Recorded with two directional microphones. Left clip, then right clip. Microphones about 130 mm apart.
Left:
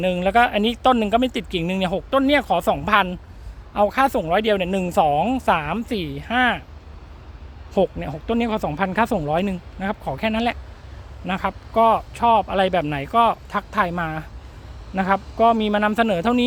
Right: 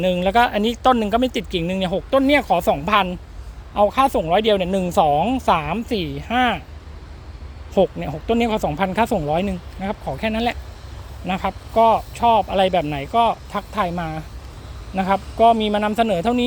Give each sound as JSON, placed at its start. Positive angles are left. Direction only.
{"t": 0.0, "sound": "speech", "side_deg": 25}
{"t": 1.6, "sound": "speech", "side_deg": 40}
{"t": 4.4, "sound": "speech", "side_deg": 25}
{"t": 7.7, "sound": "speech", "side_deg": 25}